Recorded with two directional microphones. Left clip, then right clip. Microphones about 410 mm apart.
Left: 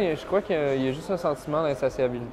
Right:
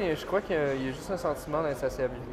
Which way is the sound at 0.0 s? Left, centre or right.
Centre.